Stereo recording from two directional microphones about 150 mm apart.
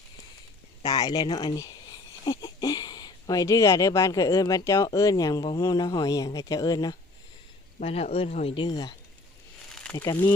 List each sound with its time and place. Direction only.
0.9 s speech: 25° left (ahead or behind)
7.8 s speech: 45° left (ahead or behind); by 10.2 s 20° left (ahead or behind)